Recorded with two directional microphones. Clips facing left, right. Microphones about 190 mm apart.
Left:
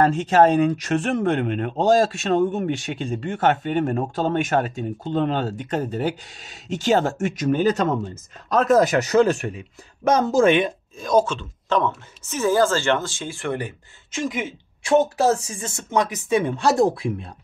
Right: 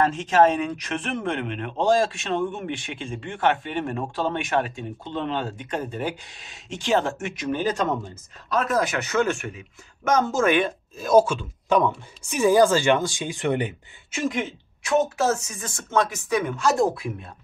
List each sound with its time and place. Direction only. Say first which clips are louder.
0.0 s speech: left 3 dB; 35° left (ahead or behind)
11.0 s speech: right 2 dB; 10° right (ahead or behind)
14.1 s speech: even; centre (ahead or behind)
14.8 s speech: left 4 dB; 30° left (ahead or behind)